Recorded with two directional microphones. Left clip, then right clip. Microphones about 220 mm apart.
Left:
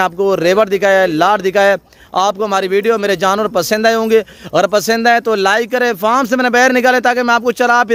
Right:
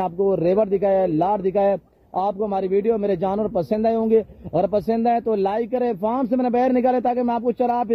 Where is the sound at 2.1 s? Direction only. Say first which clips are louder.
Left 9 dB; 30° left (ahead or behind).